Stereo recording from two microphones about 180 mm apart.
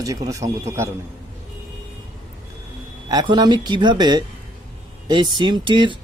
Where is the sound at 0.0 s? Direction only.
20° right (ahead or behind).